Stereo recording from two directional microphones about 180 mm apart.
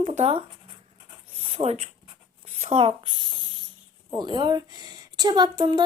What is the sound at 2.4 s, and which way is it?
A woman's voice, 40° right (ahead or behind).